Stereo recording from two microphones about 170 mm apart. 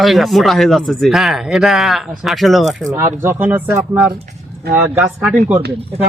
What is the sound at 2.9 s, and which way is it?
Speech, 15° right (ahead or behind).